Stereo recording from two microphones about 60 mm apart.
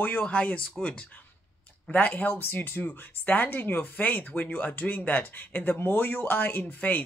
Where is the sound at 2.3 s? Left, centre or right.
Left.